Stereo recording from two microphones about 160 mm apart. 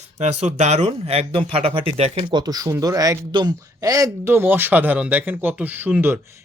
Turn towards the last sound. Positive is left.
turn(degrees=-10)  # may be behind; listen again after turning